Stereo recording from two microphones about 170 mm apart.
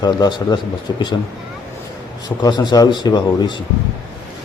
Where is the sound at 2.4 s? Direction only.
25° left (ahead or behind).